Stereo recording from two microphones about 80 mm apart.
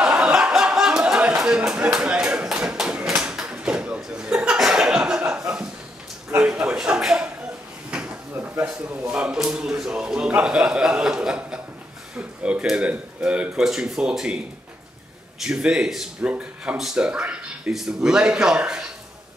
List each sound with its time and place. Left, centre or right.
0.0 s a sound: centre
7.9 s drawer open or close: centre
8.6 s a man's voice: centre
12.2 s a sound: centre
12.6 s a man's voice: centre
15.4 s a man's voice: centre